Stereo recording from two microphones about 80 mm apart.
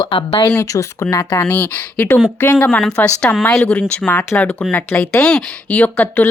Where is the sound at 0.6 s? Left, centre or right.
Left.